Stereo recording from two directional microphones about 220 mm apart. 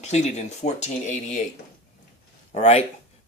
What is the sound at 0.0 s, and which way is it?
Speech, 30° left (ahead or behind).